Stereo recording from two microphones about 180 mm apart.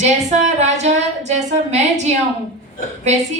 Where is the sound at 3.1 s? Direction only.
40° right (ahead or behind).